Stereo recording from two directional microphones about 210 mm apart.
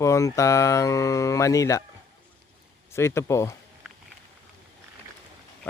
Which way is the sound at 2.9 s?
10° left (ahead or behind).